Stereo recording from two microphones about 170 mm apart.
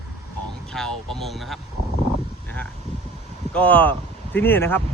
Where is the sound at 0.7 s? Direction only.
5° left (ahead or behind).